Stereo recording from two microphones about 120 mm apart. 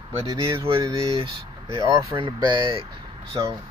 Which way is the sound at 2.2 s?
40° right (ahead or behind).